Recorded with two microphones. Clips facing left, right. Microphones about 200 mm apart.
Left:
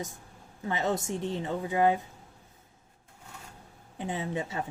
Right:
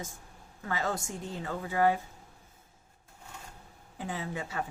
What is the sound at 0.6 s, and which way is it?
A woman's voice, 20° left (ahead or behind).